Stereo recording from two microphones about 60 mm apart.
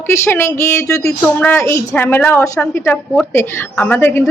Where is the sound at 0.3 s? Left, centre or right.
Left.